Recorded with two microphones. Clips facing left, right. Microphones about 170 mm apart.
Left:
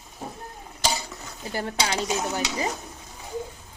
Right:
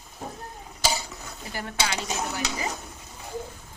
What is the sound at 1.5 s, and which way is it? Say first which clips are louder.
Speech: left 3 dB; 30° left (ahead or behind).